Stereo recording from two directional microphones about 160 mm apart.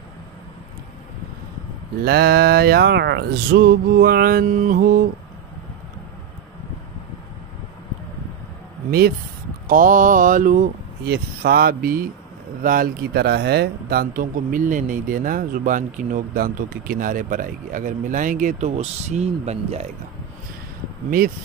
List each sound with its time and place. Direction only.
2.0 s music: 80° right; by 5.0 s 60° right (ahead or behind)
9.7 s speech: 55° right (ahead or behind)
11.1 s music: 75° right (ahead or behind)
12.6 s speech: 60° right (ahead or behind); by 19.9 s 40° right (ahead or behind)